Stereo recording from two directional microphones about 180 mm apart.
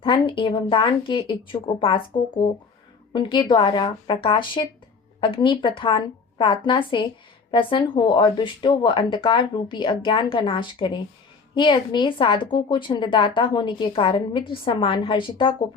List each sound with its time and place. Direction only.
0.0 s a woman's voice: 30° left (ahead or behind)